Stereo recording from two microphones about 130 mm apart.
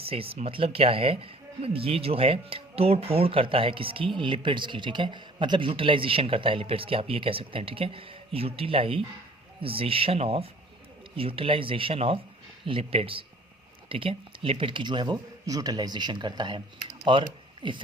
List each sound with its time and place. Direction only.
0.0 s speech: 45° right (ahead or behind)